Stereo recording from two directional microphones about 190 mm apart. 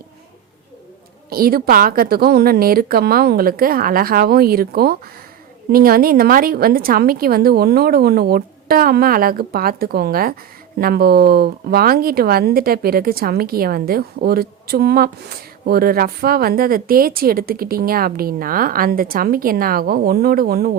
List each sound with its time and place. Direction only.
1.3 s a woman's voice: 50° right (ahead or behind)